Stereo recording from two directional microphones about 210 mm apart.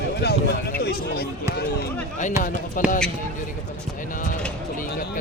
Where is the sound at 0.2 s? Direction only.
50° left (ahead or behind).